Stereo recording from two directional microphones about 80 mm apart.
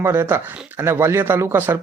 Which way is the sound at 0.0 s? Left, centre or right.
Right.